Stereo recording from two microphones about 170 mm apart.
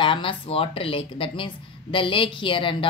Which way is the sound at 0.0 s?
30° left (ahead or behind).